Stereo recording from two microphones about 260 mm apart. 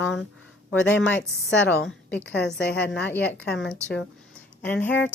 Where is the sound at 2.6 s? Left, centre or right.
Left.